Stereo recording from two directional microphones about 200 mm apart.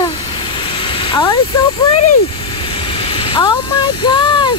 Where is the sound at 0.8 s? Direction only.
25° left (ahead or behind).